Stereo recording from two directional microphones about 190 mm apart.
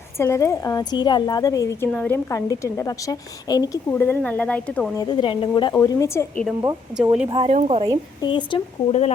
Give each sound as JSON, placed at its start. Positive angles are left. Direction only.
{"t": 0.2, "sound": "a woman's voice", "side_deg": 15}
{"t": 4.9, "sound": "speech", "side_deg": 25}
{"t": 5.7, "sound": "a woman's voice", "side_deg": 15}
{"t": 6.9, "sound": "speech", "side_deg": -5}
{"t": 7.3, "sound": "speech", "side_deg": -25}
{"t": 8.2, "sound": "speech", "side_deg": 25}